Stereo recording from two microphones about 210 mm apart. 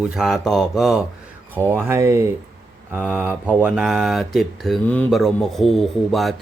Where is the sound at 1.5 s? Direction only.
10° right (ahead or behind).